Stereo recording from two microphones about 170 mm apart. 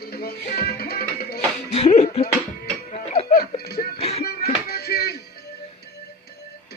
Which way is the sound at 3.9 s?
35° left (ahead or behind).